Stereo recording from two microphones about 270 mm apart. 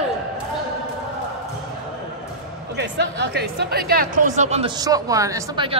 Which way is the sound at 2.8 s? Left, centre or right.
Right.